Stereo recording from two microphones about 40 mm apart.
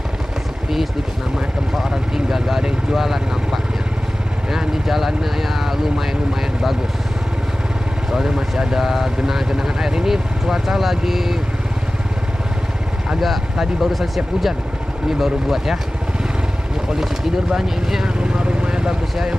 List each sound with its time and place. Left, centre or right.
1.8 s speech: centre
4.5 s speech: centre
8.1 s speech: centre
13.2 s speech: centre
16.9 s speech: centre
18.4 s vehicle: right